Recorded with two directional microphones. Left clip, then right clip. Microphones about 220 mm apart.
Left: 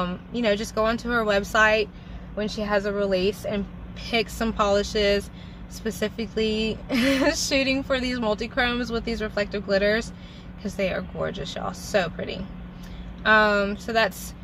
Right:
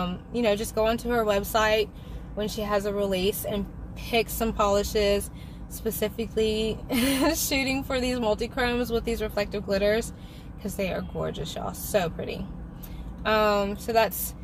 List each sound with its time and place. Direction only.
0.0 s a woman's voice: 10° left (ahead or behind)
2.7 s a woman's voice: centre (ahead or behind)